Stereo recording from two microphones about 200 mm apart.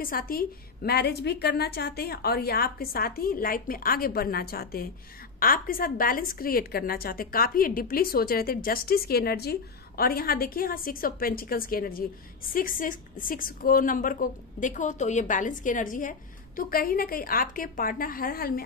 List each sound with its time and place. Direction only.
0.0 s a woman's voice: 45° left (ahead or behind)